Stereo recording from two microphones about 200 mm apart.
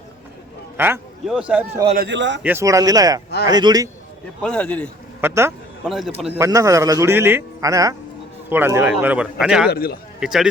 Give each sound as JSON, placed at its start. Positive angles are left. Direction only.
{"t": 0.8, "sound": "a man's voice", "side_deg": -5}
{"t": 2.0, "sound": "speech", "side_deg": -60}
{"t": 2.4, "sound": "a man's voice", "side_deg": -10}
{"t": 4.4, "sound": "a man's voice", "side_deg": 5}
{"t": 5.2, "sound": "a man's voice", "side_deg": -15}
{"t": 9.6, "sound": "a man's voice", "side_deg": 50}
{"t": 10.2, "sound": "speech", "side_deg": -5}